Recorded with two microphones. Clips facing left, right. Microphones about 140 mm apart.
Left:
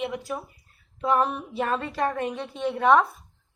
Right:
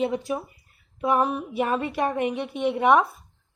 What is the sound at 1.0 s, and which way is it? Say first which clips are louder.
A woman's voice: right 1 dB; 10° right (ahead or behind).